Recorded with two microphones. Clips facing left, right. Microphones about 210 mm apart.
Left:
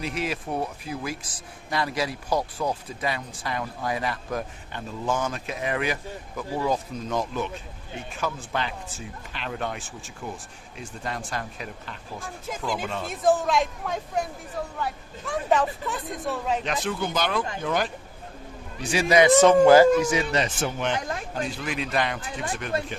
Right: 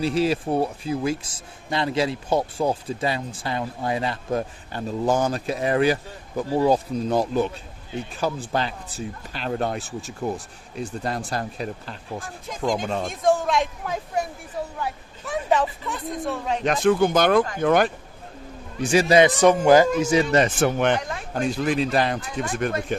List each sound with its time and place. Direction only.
0.0 s speech: 30° right (ahead or behind)
13.1 s speech: centre (ahead or behind)
16.6 s speech: 50° right (ahead or behind)
18.8 s speech: 45° right (ahead or behind)
19.0 s speech: 30° right (ahead or behind)
19.4 s speech: 15° right (ahead or behind)
20.3 s speech: 55° right (ahead or behind)
21.3 s speech: 40° right (ahead or behind)
22.9 s speech: 45° right (ahead or behind)